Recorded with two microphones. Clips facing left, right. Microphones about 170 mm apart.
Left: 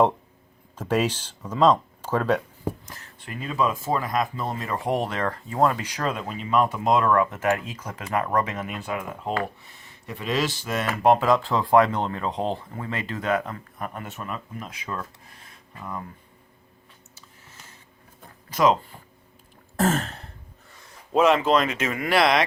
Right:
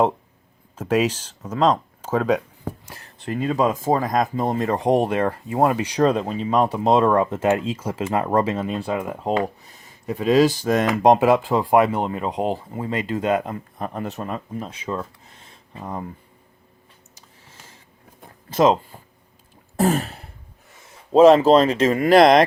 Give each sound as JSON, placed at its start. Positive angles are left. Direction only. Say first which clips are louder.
{"t": 0.8, "sound": "speech", "louder": "right 3 dB", "side_deg": -10}
{"t": 2.8, "sound": "speech", "louder": "right 9 dB", "side_deg": -35}
{"t": 4.7, "sound": "speech", "louder": "right 6 dB", "side_deg": -20}
{"t": 6.0, "sound": "speech", "louder": "right 9 dB", "side_deg": -35}
{"t": 9.6, "sound": "speech", "louder": "right 2 dB", "side_deg": -40}
{"t": 10.8, "sound": "speech", "louder": "right 3 dB", "side_deg": -15}
{"t": 18.5, "sound": "speech", "louder": "right 4 dB", "side_deg": -25}
{"t": 19.7, "sound": "throat clearing", "louder": "right 3 dB", "side_deg": -15}
{"t": 20.7, "sound": "speech", "louder": "right 8 dB", "side_deg": -25}
{"t": 22.2, "sound": "speech", "louder": "right 7 dB", "side_deg": -45}